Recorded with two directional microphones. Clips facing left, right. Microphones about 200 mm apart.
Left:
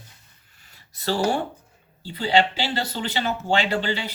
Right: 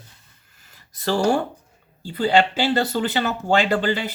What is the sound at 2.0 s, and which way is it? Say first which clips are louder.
Speech: right 2 dB; 50° right (ahead or behind).